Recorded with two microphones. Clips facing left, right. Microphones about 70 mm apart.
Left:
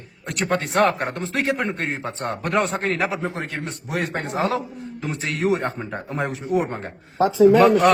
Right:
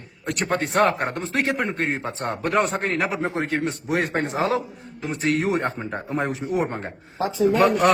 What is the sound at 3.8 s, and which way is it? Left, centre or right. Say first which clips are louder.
Speech: right 1 dB; right.